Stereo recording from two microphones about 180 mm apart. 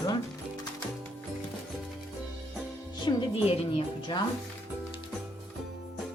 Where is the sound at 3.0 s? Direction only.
30° left (ahead or behind).